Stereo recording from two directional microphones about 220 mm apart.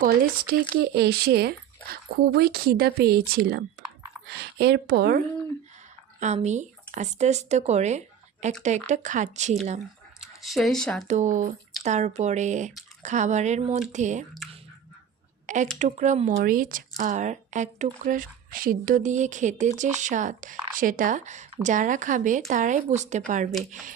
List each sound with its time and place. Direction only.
0.0 s speech: 45° right (ahead or behind)
6.1 s speech: 30° right (ahead or behind)
10.2 s speech: centre (ahead or behind)
11.1 s speech: 35° right (ahead or behind)
15.5 s speech: 35° right (ahead or behind)